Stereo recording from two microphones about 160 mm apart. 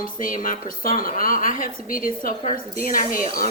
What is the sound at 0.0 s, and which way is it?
A woman's voice, 55° left (ahead or behind).